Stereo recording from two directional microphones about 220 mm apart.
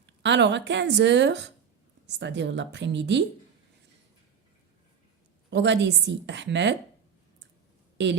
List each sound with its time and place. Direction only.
0.0 s a woman's voice: 55° right (ahead or behind)
5.5 s a woman's voice: 55° right (ahead or behind)
8.0 s a woman's voice: 55° right (ahead or behind)